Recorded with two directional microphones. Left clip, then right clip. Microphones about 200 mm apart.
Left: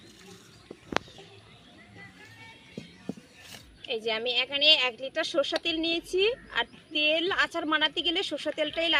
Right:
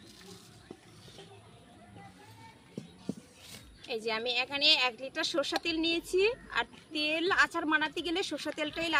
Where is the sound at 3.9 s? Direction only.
10° right (ahead or behind).